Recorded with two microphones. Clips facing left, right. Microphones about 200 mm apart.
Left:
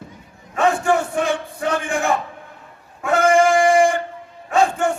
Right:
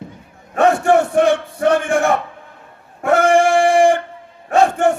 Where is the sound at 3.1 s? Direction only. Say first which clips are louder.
Right 2 dB; 65° right (ahead or behind).